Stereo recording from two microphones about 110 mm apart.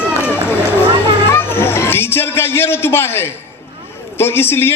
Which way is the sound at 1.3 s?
20° left (ahead or behind).